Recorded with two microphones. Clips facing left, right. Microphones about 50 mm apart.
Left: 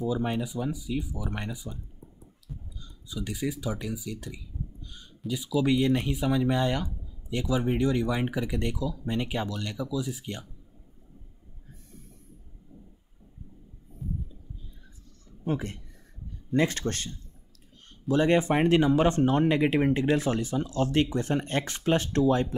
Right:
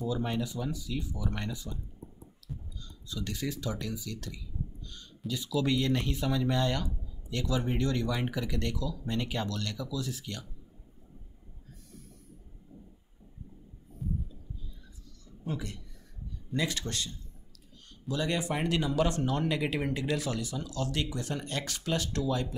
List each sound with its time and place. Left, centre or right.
0.0 s speech: centre
15.4 s a man's voice: left